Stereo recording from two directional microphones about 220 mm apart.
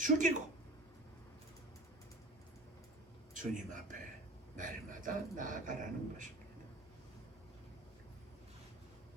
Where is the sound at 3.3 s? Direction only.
35° right (ahead or behind).